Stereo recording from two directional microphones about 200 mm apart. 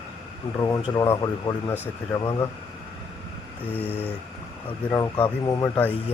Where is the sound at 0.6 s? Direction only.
20° left (ahead or behind).